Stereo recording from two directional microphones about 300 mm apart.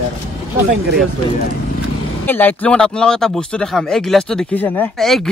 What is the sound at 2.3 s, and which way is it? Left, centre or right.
Speech, centre.